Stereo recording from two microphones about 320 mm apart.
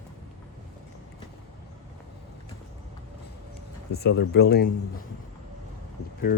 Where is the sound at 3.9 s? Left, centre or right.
Left.